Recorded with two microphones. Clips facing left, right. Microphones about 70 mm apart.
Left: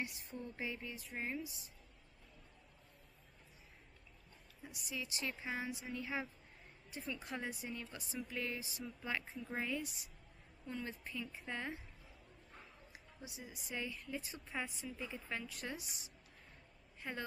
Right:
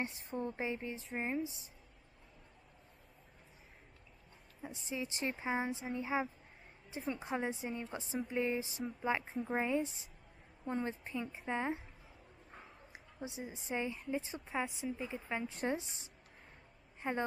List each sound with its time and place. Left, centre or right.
0.0 s speech: right
4.6 s speech: right
9.3 s speech: right
9.6 s speech: right
12.4 s a sound: right
14.5 s speech: centre
15.4 s speech: right